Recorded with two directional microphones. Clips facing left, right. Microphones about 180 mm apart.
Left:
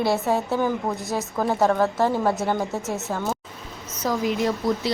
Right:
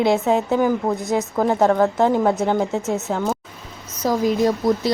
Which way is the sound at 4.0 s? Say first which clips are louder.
Right 5 dB; 35° right (ahead or behind).